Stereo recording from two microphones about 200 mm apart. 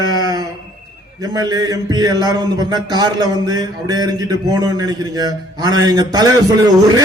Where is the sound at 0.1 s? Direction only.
20° right (ahead or behind).